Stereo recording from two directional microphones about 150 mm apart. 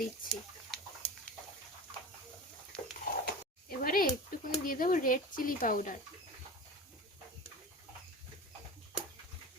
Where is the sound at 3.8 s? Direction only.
70° left (ahead or behind).